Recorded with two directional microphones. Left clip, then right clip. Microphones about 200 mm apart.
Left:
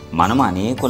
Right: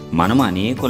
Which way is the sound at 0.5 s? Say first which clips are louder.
Even; 15° right (ahead or behind).